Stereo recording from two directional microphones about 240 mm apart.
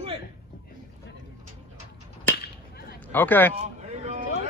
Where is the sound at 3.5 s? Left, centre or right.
Right.